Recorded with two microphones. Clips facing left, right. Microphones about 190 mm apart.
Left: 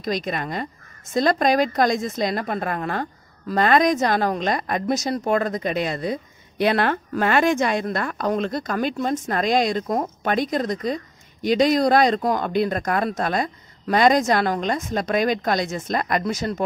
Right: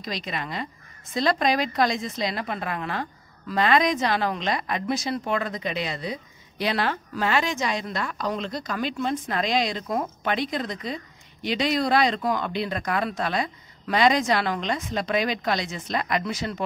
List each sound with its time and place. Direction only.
0.0 s speech: 45° left (ahead or behind)